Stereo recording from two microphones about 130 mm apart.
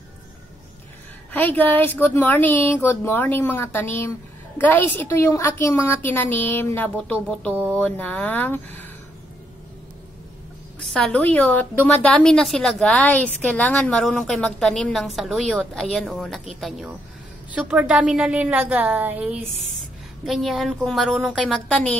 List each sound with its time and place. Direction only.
1.3 s speech: 15° left (ahead or behind)
10.9 s a woman's voice: 5° left (ahead or behind)